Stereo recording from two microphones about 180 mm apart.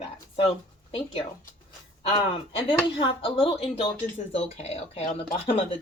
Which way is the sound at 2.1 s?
25° left (ahead or behind).